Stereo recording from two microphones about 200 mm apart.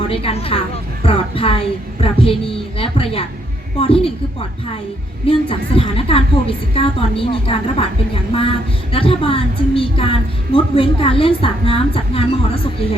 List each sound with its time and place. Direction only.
0.1 s a woman's voice: 30° left (ahead or behind)